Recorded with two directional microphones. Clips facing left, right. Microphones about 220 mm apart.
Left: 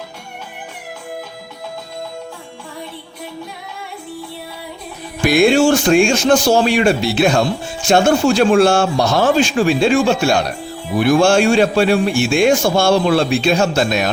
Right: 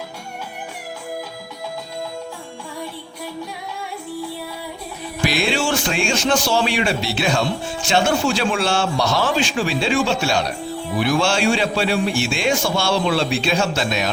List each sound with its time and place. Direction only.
5.2 s a man's voice: 50° left (ahead or behind)